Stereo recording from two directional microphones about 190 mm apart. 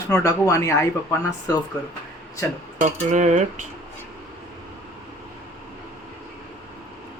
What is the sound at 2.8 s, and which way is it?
Cutlery, 40° right (ahead or behind).